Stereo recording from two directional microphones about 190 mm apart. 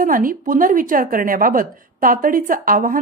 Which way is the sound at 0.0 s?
45° right (ahead or behind).